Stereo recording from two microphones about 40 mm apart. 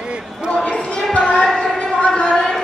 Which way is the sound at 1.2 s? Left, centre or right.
Centre.